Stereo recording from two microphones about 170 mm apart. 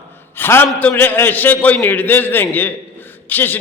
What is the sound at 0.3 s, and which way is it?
A man's voice, 15° left (ahead or behind).